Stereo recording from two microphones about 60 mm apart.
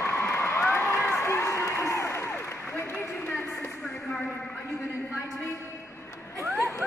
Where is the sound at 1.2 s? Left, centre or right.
Left.